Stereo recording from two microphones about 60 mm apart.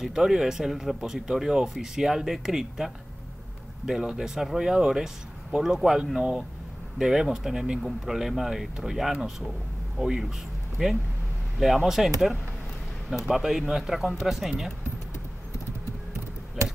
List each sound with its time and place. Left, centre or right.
0.0 s a man's voice: centre
11.6 s speech: centre
13.2 s speech: centre